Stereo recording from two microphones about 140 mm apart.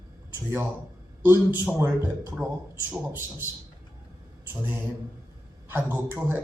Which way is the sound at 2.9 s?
15° right (ahead or behind).